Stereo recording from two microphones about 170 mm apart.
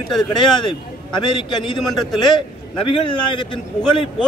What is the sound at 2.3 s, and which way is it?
A man's voice, 30° left (ahead or behind).